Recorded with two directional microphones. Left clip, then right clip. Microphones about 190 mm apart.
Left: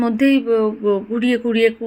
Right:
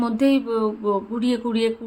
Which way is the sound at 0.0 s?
15° left (ahead or behind).